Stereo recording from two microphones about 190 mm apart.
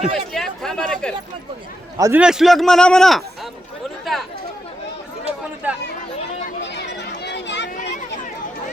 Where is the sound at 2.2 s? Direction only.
Centre (ahead or behind).